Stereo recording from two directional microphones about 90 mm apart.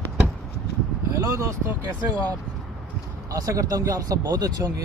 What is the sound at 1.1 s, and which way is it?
Speech, 35° right (ahead or behind).